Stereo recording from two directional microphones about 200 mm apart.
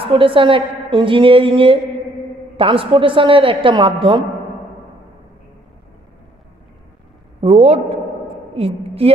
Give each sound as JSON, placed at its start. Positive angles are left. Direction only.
{"t": 0.0, "sound": "a woman's voice", "side_deg": -25}
{"t": 7.4, "sound": "a man's voice", "side_deg": -30}